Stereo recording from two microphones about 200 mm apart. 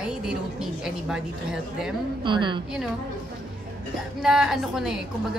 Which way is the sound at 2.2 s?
25° right (ahead or behind).